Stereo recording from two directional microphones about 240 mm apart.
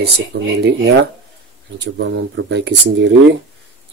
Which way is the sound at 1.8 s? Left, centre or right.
Right.